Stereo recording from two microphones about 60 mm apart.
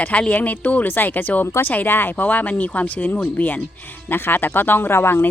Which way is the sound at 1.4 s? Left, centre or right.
Left.